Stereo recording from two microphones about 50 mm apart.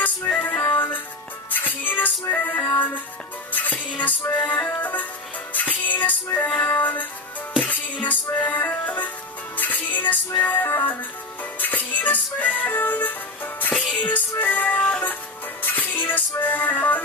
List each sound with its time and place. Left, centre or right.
0.4 s music: left